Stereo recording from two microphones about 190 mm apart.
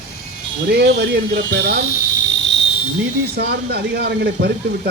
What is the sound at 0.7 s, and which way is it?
Speech, 55° right (ahead or behind).